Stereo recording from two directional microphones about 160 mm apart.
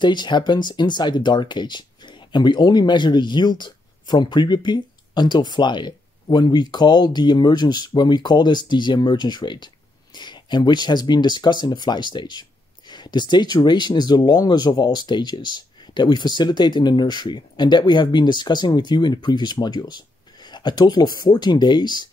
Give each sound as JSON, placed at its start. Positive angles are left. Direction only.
{"t": 0.0, "sound": "speech", "side_deg": 30}